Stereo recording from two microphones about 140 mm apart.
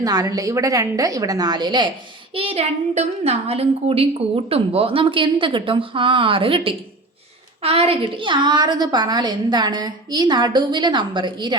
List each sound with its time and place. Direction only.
0.0 s a woman's voice: 25° right (ahead or behind)
2.3 s a woman's voice: 45° right (ahead or behind)
7.6 s a woman's voice: 45° right (ahead or behind)